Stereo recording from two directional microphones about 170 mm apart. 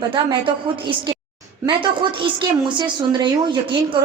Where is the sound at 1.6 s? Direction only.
30° right (ahead or behind).